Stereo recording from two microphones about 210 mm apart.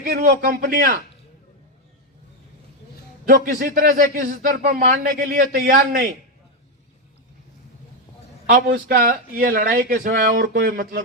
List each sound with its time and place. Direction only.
0.0 s speech: 45° right (ahead or behind)
3.2 s speech: 45° right (ahead or behind)
8.4 s speech: 45° right (ahead or behind)